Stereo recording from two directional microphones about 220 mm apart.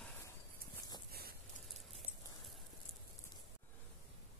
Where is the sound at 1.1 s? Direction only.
45° right (ahead or behind).